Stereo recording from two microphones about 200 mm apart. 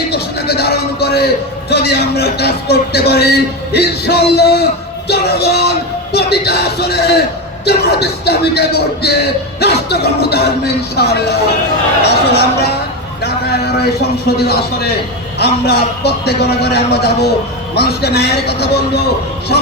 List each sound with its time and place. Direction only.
0.1 s a man's voice: 55° left (ahead or behind)
5.0 s music: 55° left (ahead or behind)
6.1 s a man's voice: 55° left (ahead or behind)